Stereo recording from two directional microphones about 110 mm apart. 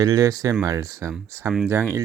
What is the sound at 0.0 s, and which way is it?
Speech, 35° right (ahead or behind).